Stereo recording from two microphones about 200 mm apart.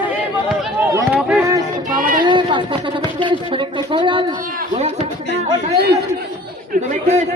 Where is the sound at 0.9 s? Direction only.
10° right (ahead or behind).